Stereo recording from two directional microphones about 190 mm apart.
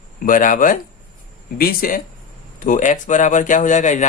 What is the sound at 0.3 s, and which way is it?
Speech, 45° left (ahead or behind).